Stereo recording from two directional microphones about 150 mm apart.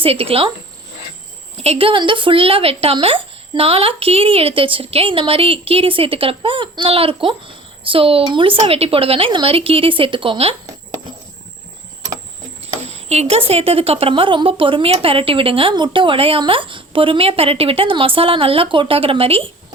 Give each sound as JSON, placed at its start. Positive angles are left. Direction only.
{"t": 0.0, "sound": "speech", "side_deg": -40}
{"t": 1.5, "sound": "speech", "side_deg": -40}
{"t": 12.6, "sound": "a sound", "side_deg": -45}
{"t": 13.5, "sound": "speech", "side_deg": -40}